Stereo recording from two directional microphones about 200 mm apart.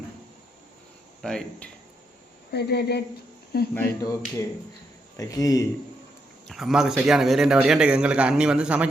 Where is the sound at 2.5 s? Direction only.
55° left (ahead or behind).